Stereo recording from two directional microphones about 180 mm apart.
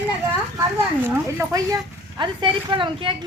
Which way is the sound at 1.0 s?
15° right (ahead or behind).